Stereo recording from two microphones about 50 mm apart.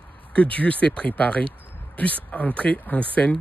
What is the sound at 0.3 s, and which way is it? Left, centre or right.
Speech, left.